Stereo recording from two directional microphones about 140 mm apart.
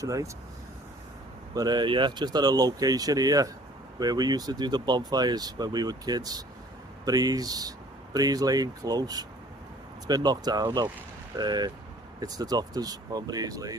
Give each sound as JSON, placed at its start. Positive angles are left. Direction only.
{"t": 0.0, "sound": "speech", "side_deg": -25}
{"t": 1.5, "sound": "speech", "side_deg": -30}